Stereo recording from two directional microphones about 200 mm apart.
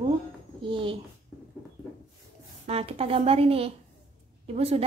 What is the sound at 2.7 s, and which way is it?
A woman's voice, 30° right (ahead or behind).